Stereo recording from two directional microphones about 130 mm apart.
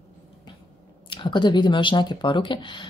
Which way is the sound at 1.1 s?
40° left (ahead or behind).